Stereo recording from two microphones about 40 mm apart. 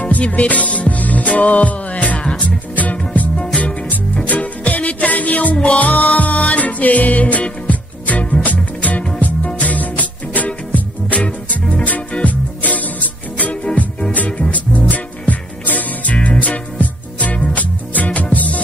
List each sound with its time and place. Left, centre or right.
0.0 s music: left
3.3 s music: left
14.9 s music: left